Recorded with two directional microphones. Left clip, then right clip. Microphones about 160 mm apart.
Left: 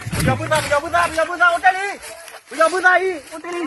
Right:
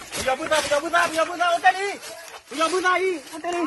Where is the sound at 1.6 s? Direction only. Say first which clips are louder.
Left 3 dB; 50° right (ahead or behind).